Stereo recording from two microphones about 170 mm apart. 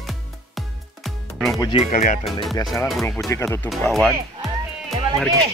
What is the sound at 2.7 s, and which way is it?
Speech, 15° left (ahead or behind).